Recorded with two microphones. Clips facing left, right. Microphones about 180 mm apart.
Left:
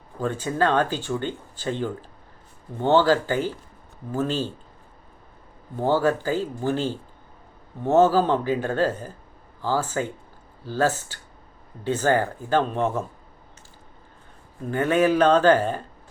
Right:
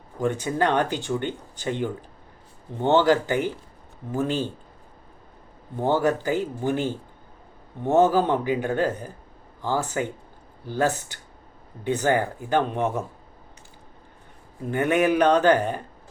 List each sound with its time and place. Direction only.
0.2 s speech: 15° right (ahead or behind)
5.8 s speech: 20° right (ahead or behind)
14.6 s speech: 20° right (ahead or behind)